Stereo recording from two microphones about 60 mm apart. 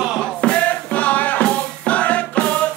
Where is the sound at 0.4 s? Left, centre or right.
Centre.